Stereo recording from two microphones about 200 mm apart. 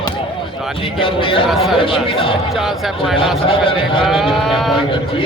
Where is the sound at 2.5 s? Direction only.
Centre (ahead or behind).